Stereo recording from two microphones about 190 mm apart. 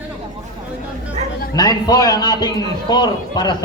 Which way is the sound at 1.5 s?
20° left (ahead or behind).